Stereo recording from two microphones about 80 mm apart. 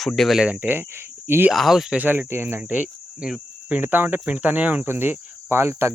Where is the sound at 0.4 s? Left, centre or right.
Centre.